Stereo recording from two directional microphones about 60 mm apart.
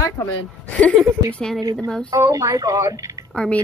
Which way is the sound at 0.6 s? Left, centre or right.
Left.